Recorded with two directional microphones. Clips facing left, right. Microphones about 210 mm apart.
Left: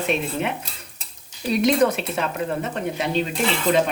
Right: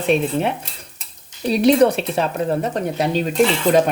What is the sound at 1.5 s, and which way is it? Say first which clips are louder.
Speech: right 5 dB; 35° right (ahead or behind).